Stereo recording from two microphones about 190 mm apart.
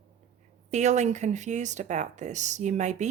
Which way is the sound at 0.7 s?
35° right (ahead or behind).